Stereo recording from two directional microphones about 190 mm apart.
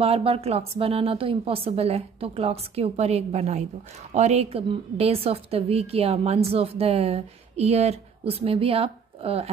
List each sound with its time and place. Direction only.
0.0 s a woman's voice: 30° right (ahead or behind)